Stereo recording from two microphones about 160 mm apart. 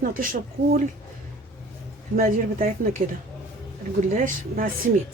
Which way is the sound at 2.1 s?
60° right (ahead or behind).